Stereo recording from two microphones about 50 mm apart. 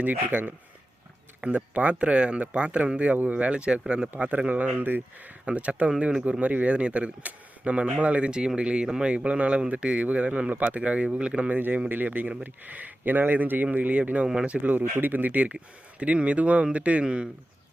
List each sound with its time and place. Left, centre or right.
0.0 s speech: right
4.7 s speech: right
5.5 s speech: right
6.4 s speech: right
10.5 s speech: right
14.6 s speech: right